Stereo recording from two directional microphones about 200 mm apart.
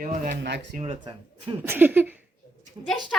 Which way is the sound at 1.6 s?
10° right (ahead or behind).